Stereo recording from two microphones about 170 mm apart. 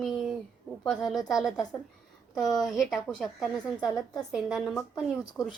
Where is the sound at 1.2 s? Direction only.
20° left (ahead or behind).